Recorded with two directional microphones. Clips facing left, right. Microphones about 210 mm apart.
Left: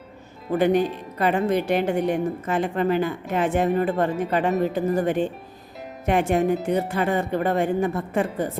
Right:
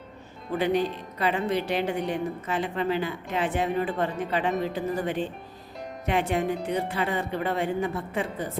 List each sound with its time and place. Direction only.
0.5 s a woman's voice: 50° left (ahead or behind)